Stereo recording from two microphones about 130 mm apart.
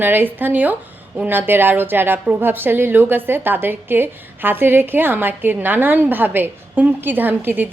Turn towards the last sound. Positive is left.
turn(degrees=-15)  # may be behind; listen again after turning